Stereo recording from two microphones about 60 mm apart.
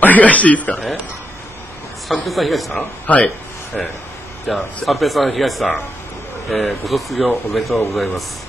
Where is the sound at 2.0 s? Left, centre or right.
Centre.